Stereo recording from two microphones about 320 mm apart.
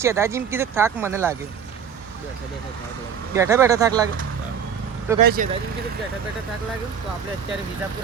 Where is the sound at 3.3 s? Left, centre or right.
Centre.